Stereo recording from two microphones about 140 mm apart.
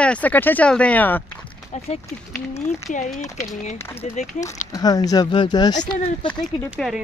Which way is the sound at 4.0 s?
60° left (ahead or behind).